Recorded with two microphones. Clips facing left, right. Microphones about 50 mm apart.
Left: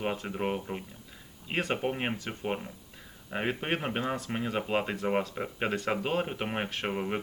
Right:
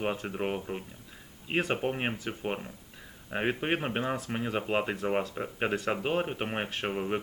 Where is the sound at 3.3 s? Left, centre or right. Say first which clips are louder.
Right 2 dB; centre.